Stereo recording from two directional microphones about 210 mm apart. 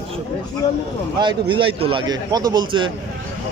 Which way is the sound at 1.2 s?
25° right (ahead or behind).